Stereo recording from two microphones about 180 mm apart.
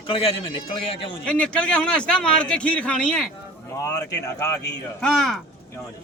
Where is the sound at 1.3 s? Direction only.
5° left (ahead or behind).